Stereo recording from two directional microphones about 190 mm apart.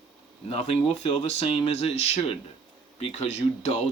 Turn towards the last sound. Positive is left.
turn(degrees=35)  # may be behind; listen again after turning